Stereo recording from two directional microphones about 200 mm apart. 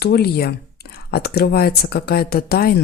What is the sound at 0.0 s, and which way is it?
Speech, 50° left (ahead or behind).